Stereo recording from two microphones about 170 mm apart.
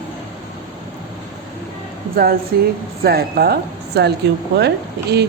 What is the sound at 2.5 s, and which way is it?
A man's voice, 70° right (ahead or behind).